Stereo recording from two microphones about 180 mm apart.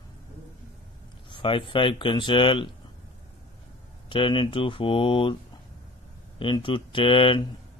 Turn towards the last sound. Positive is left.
turn(degrees=30)  # may be behind; listen again after turning